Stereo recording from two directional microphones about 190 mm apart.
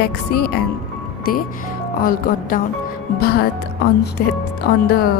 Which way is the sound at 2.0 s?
45° left (ahead or behind).